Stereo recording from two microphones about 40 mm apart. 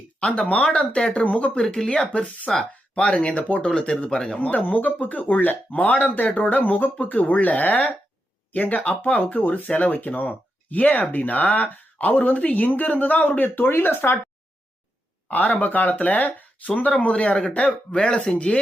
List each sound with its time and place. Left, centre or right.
0.2 s speech: left
1.6 s speech: centre
1.9 s speech: left
2.9 s speech: left
3.7 s speech: centre
4.4 s speech: left
15.3 s speech: left